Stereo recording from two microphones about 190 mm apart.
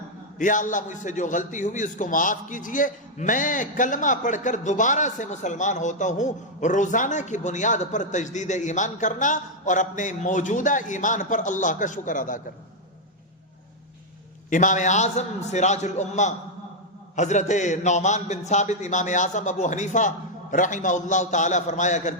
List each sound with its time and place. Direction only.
0.3 s a man's voice: 45° left (ahead or behind)
14.5 s a man's voice: 40° left (ahead or behind)